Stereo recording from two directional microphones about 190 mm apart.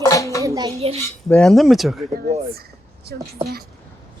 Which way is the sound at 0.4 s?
20° right (ahead or behind).